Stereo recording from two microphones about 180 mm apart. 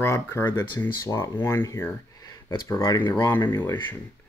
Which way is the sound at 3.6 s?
10° left (ahead or behind).